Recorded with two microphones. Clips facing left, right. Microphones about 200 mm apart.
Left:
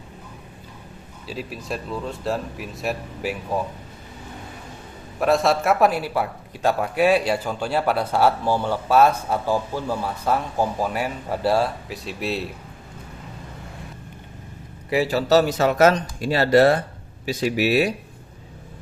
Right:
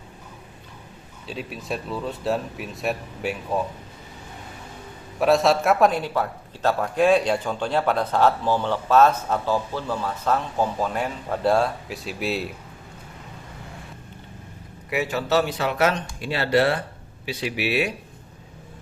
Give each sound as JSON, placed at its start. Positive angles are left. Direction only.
{"t": 1.3, "sound": "speech", "side_deg": 0}
{"t": 5.2, "sound": "a man's voice", "side_deg": 0}
{"t": 14.8, "sound": "speech", "side_deg": 35}